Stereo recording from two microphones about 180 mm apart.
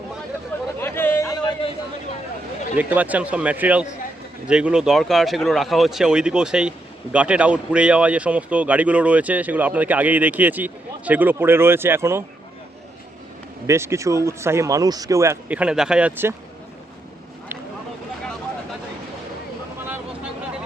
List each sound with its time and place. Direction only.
0.8 s a sound: 15° left (ahead or behind)
2.7 s speech: 10° right (ahead or behind)
13.7 s speech: 15° right (ahead or behind)